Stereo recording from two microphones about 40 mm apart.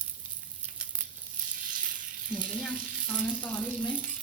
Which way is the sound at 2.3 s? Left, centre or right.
Right.